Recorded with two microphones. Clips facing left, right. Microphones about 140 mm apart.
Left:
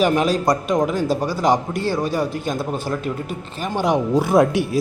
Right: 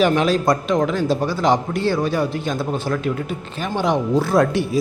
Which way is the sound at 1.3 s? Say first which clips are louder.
Even; 40° left (ahead or behind).